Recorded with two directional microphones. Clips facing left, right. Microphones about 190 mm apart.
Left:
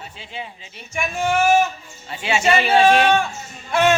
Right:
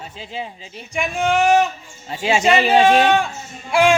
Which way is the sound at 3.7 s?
10° right (ahead or behind).